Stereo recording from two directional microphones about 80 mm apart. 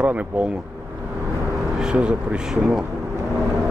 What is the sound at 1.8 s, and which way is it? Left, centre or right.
Speech, centre.